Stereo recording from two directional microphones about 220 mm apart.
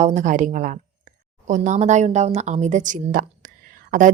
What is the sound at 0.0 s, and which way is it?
A woman's voice, 35° right (ahead or behind).